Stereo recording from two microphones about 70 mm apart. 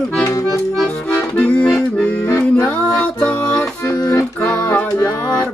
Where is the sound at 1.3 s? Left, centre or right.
Centre.